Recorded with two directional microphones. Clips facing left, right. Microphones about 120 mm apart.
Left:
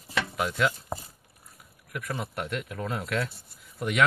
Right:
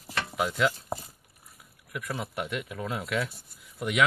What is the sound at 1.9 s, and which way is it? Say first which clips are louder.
Speech: even; 5° right (ahead or behind).